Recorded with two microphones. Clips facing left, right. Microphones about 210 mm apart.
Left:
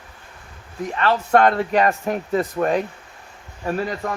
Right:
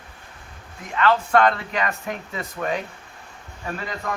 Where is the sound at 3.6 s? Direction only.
35° left (ahead or behind).